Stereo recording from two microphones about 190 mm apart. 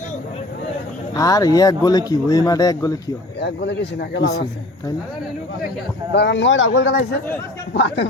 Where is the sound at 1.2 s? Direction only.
20° left (ahead or behind).